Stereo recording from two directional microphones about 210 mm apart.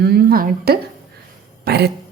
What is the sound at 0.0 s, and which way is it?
A woman's voice, 50° right (ahead or behind).